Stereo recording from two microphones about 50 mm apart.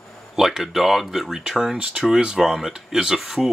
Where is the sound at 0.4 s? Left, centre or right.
Centre.